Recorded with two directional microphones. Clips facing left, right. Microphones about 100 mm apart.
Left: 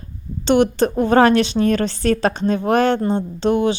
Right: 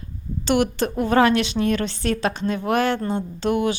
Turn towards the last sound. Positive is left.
turn(degrees=25)  # may be behind; listen again after turning